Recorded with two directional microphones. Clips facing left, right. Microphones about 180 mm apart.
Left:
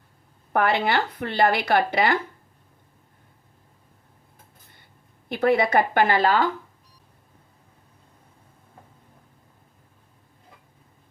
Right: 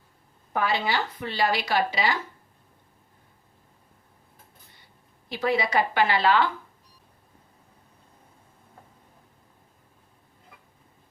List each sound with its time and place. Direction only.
0.5 s speech: 60° left (ahead or behind)
5.3 s speech: 55° left (ahead or behind)